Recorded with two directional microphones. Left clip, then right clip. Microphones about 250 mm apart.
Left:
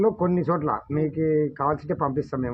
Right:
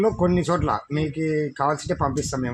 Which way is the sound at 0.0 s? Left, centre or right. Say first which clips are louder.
Right 1 dB; right.